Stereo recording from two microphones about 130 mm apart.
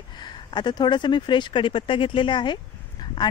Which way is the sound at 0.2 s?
35° left (ahead or behind).